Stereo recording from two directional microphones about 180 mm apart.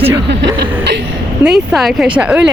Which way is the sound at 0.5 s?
65° right (ahead or behind).